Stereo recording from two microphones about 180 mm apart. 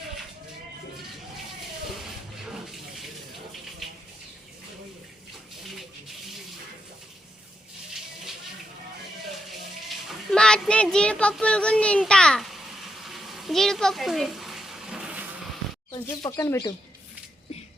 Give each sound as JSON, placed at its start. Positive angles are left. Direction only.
{"t": 10.3, "sound": "child singing", "side_deg": 5}
{"t": 13.0, "sound": "frying", "side_deg": 0}
{"t": 16.0, "sound": "speech", "side_deg": 20}